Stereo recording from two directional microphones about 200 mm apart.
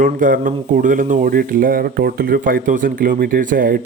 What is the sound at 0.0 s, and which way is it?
A man's voice, 40° right (ahead or behind).